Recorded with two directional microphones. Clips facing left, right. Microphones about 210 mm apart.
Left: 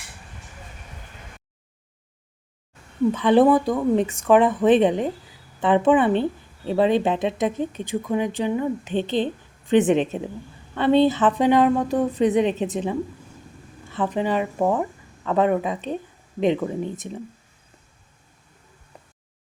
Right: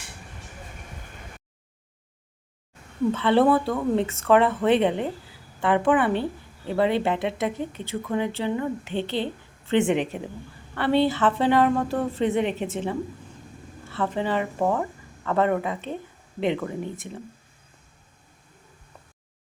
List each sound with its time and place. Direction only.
3.1 s a woman's voice: 15° left (ahead or behind)